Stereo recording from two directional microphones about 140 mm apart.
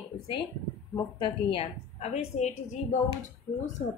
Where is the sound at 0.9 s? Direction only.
35° left (ahead or behind); by 3.0 s 55° left (ahead or behind).